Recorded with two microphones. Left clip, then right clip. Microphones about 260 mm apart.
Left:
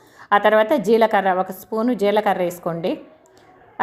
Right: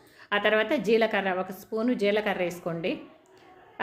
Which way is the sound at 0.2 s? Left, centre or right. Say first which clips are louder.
Left 9 dB; centre.